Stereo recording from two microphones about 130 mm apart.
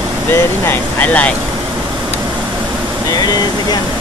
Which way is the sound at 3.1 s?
30° left (ahead or behind).